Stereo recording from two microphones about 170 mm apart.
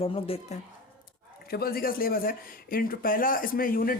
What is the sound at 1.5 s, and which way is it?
Speech, 65° left (ahead or behind).